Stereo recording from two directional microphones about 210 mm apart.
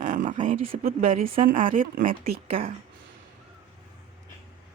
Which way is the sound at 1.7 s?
40° right (ahead or behind).